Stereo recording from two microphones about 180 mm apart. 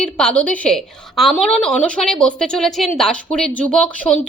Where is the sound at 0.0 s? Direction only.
5° left (ahead or behind).